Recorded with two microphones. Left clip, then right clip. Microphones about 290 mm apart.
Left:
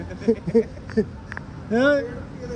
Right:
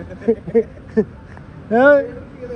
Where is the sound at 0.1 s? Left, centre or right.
Centre.